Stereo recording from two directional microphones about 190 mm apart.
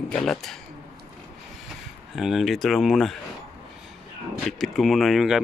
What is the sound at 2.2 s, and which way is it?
Speech, centre (ahead or behind).